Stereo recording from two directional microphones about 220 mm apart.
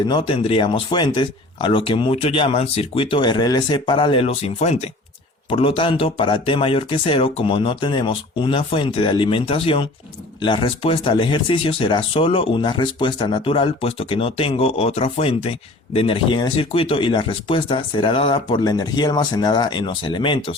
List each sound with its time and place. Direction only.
0.0 s speech: 20° left (ahead or behind)